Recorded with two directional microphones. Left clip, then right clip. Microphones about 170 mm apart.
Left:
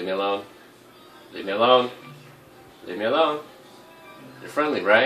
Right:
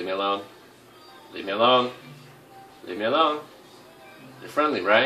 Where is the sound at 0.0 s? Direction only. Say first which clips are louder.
Left 1 dB; 10° left (ahead or behind).